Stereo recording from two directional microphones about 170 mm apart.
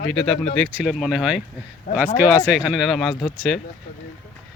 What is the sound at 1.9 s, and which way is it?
Speech, 60° left (ahead or behind).